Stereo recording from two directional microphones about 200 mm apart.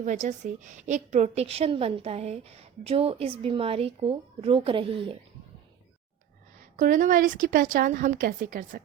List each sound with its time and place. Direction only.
0.0 s a woman's voice: 35° right (ahead or behind)
6.7 s a woman's voice: 40° right (ahead or behind)